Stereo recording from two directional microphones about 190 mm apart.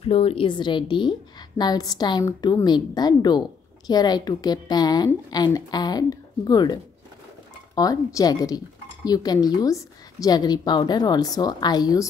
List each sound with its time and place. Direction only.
0.0 s a woman's voice: 30° left (ahead or behind)